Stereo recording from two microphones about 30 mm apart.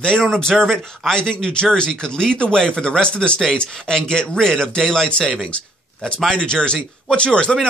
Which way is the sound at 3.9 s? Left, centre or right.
Left.